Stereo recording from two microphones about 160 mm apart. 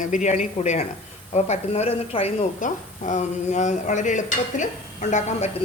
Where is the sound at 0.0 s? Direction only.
50° left (ahead or behind).